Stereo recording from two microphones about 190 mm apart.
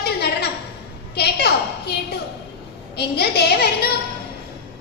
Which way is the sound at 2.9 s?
60° left (ahead or behind).